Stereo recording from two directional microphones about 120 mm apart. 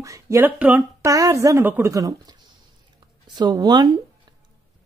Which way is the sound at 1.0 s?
30° right (ahead or behind).